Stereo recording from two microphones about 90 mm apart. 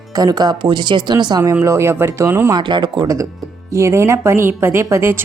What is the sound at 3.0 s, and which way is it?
A woman's voice, 40° right (ahead or behind).